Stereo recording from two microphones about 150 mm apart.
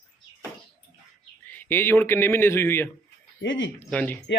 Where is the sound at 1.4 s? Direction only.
10° left (ahead or behind).